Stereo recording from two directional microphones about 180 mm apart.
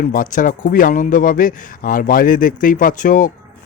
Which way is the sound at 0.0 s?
50° left (ahead or behind).